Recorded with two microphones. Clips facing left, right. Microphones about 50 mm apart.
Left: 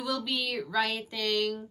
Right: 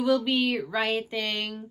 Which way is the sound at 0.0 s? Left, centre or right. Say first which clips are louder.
Right 8 dB; right.